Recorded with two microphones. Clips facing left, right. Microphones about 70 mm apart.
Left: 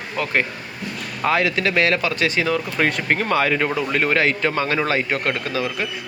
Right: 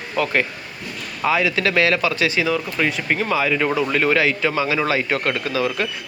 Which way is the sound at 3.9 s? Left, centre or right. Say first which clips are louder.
Right 1 dB; left.